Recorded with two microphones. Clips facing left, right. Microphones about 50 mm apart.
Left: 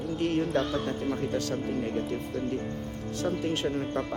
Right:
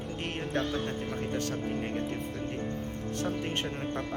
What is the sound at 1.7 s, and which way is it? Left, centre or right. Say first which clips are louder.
Music: left 3 dB; right.